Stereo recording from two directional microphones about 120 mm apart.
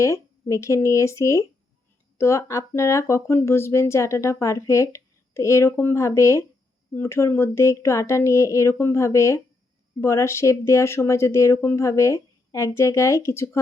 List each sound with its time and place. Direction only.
0.0 s speech: 25° left (ahead or behind)